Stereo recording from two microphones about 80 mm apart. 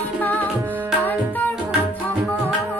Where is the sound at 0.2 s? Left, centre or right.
Left.